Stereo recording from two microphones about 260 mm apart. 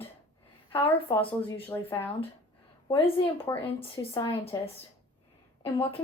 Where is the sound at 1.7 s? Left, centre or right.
Centre.